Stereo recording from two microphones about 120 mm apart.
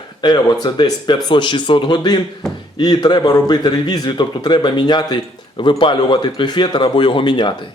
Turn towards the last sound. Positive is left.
turn(degrees=40)  # may be behind; listen again after turning